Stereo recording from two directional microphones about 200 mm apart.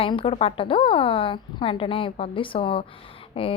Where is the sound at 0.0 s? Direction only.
25° left (ahead or behind).